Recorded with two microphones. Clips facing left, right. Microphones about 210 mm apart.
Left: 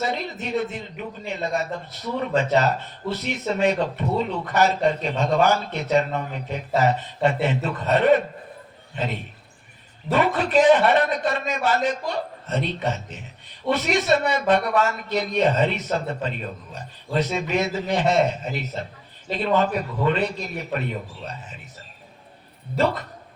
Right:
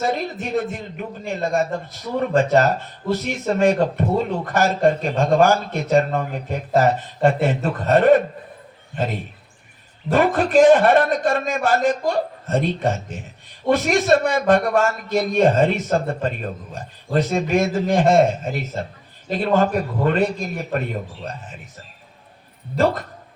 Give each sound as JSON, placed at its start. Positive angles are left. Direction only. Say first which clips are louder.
{"t": 0.0, "sound": "a man's voice", "louder": "right 4 dB", "side_deg": -50}
{"t": 10.1, "sound": "a man's voice", "louder": "right 3 dB", "side_deg": -50}